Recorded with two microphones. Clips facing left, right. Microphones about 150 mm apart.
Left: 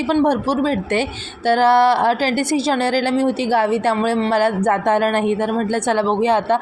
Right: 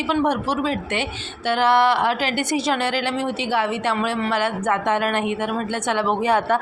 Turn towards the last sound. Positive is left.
turn(degrees=25)  # may be behind; listen again after turning